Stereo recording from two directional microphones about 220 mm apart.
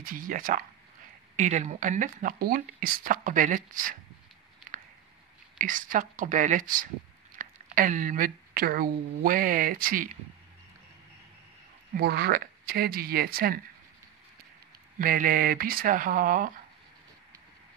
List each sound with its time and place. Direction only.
0.0 s speech: 40° right (ahead or behind)
5.6 s a woman's voice: 35° right (ahead or behind)
11.9 s speech: 45° right (ahead or behind)
15.0 s speech: 40° right (ahead or behind)